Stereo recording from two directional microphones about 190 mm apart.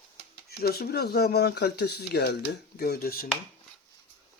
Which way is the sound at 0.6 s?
55° left (ahead or behind).